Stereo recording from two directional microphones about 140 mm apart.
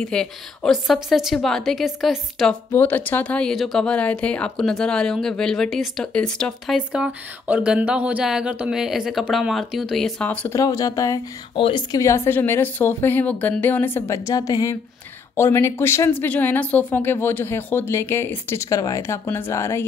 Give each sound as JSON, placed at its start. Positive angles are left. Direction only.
{"t": 0.0, "sound": "speech", "side_deg": 5}
{"t": 2.7, "sound": "speech", "side_deg": 15}
{"t": 6.9, "sound": "speech", "side_deg": -10}
{"t": 10.5, "sound": "speech", "side_deg": 25}
{"t": 11.5, "sound": "speech", "side_deg": 35}
{"t": 12.0, "sound": "speech", "side_deg": 20}